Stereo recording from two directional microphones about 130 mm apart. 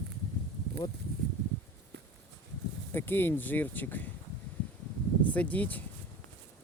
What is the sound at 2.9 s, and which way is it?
Speech, 15° left (ahead or behind).